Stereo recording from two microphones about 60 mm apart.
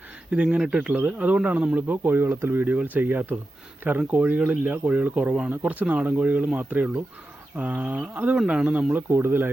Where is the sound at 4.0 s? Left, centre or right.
Right.